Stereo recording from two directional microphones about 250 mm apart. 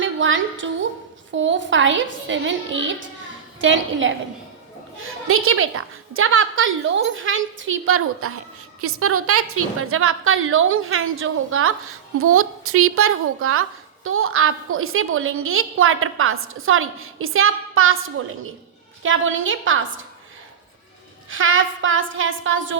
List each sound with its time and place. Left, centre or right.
0.0 s a woman's voice: right
19.0 s a woman's voice: right
21.2 s a woman's voice: right